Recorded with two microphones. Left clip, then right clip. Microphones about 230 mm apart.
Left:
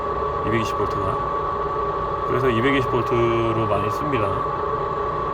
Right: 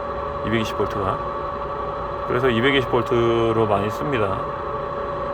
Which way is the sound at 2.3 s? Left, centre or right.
Centre.